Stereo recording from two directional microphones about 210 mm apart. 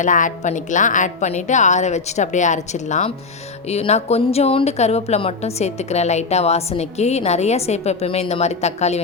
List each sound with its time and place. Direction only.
0.0 s speech: 35° left (ahead or behind)